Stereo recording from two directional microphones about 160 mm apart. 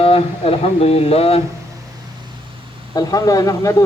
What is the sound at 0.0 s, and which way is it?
Speech, 35° left (ahead or behind).